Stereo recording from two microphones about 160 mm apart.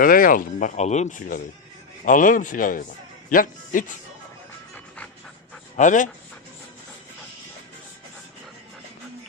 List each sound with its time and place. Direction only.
0.0 s a man's voice: 60° left (ahead or behind)
5.7 s speech: 50° left (ahead or behind)